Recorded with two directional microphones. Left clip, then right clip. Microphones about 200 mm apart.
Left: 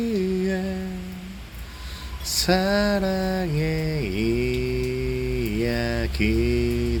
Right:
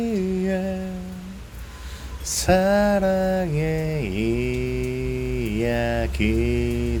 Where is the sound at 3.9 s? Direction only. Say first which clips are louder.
Even; 30° right (ahead or behind).